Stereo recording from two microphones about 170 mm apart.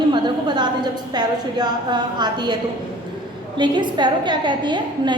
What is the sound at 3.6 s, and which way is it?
A woman's voice, 25° right (ahead or behind).